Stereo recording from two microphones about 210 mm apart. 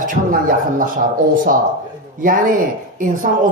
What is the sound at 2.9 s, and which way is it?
Speech, 40° right (ahead or behind).